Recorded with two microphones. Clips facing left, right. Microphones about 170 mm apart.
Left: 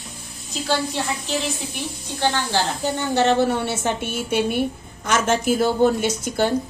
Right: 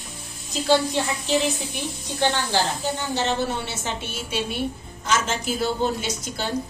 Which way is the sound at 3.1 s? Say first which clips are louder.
Left 8 dB; 55° left (ahead or behind).